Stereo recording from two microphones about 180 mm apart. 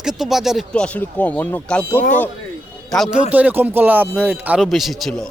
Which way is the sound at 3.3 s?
10° right (ahead or behind).